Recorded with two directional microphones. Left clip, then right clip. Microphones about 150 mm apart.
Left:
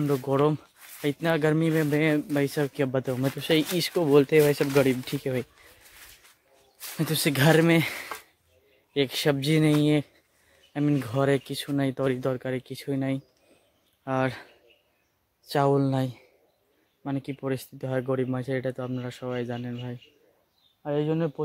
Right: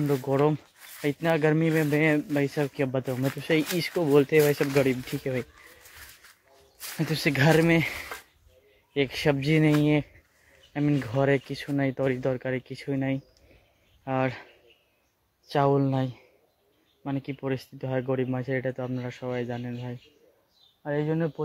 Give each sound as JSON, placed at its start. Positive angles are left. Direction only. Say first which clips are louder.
{"t": 0.0, "sound": "speech", "louder": "even", "side_deg": 15}
{"t": 0.3, "sound": "speech", "louder": "even", "side_deg": 35}
{"t": 1.5, "sound": "speech", "louder": "even", "side_deg": 20}
{"t": 2.0, "sound": "speech", "louder": "even", "side_deg": 35}
{"t": 4.5, "sound": "speech", "louder": "left 1 dB", "side_deg": 30}
{"t": 7.0, "sound": "speech", "louder": "even", "side_deg": 40}
{"t": 9.2, "sound": "speech", "louder": "right 1 dB", "side_deg": 30}
{"t": 10.7, "sound": "speech", "louder": "even", "side_deg": 30}
{"t": 14.0, "sound": "speech", "louder": "left 1 dB", "side_deg": 40}
{"t": 15.5, "sound": "speech", "louder": "even", "side_deg": 30}
{"t": 15.8, "sound": "speech", "louder": "left 1 dB", "side_deg": 45}
{"t": 20.8, "sound": "speech", "louder": "left 1 dB", "side_deg": 45}